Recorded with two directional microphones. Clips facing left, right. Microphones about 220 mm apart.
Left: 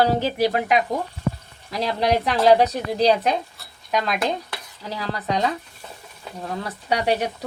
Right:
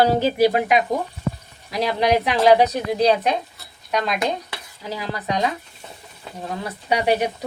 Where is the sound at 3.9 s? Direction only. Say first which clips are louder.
Right 1 dB; centre (ahead or behind).